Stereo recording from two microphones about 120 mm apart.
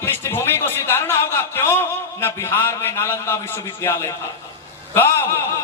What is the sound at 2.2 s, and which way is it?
A man's voice, 20° left (ahead or behind).